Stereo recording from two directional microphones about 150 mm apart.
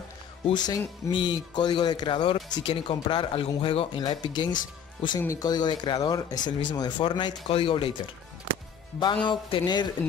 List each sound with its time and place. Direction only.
0.5 s speech: 25° left (ahead or behind)
9.0 s speech: 30° left (ahead or behind)